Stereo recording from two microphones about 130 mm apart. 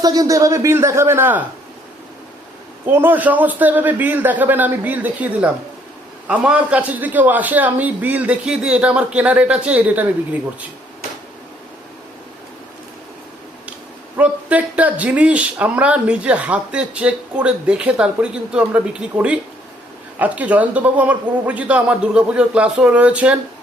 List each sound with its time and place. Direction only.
0.0 s speech: 30° right (ahead or behind)
2.8 s a man's voice: 15° right (ahead or behind)
14.2 s a man's voice: 10° right (ahead or behind)